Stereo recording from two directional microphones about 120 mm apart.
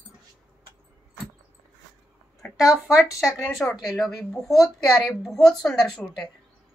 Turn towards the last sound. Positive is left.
turn(degrees=5)  # may be behind; listen again after turning